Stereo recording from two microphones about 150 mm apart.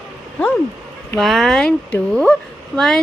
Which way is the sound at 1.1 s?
Centre (ahead or behind).